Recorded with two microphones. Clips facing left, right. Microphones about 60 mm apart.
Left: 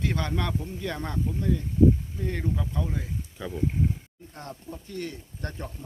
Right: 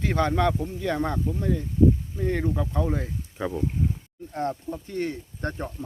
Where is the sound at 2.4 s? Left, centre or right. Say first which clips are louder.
Right 5 dB; right.